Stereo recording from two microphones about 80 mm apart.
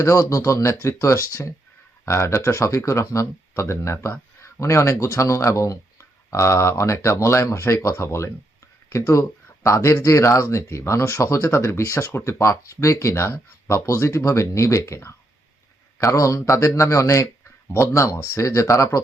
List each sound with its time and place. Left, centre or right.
0.0 s speech: left
16.1 s speech: left